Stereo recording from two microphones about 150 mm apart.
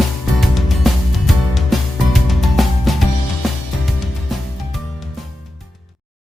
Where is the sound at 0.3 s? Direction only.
Centre (ahead or behind).